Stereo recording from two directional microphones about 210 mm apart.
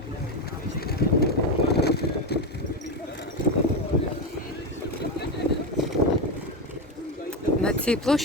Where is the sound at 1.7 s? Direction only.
50° left (ahead or behind).